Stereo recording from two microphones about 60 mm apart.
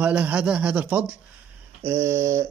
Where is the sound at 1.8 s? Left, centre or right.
Right.